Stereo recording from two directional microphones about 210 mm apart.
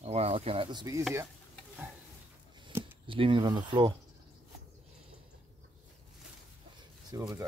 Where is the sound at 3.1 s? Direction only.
25° right (ahead or behind).